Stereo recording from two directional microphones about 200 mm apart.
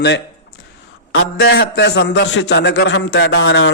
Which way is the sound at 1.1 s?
55° left (ahead or behind).